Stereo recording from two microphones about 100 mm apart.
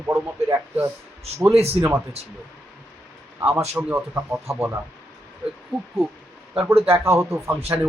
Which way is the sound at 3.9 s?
25° right (ahead or behind).